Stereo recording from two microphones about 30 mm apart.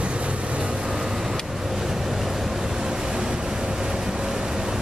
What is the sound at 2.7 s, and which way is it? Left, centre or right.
Vehicle, centre.